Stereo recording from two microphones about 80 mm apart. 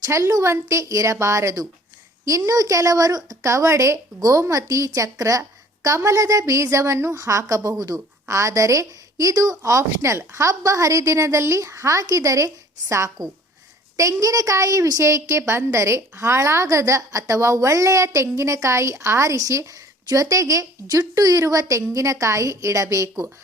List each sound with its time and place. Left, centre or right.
0.0 s a woman's voice: right
3.4 s a woman's voice: right